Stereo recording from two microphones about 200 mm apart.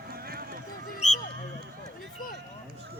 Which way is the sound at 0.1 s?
50° right (ahead or behind).